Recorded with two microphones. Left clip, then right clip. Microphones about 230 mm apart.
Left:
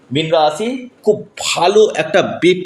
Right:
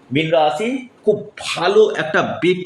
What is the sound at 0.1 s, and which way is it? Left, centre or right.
Speech, left.